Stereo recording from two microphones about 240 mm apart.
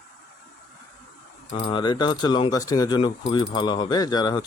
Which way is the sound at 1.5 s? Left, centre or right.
Left.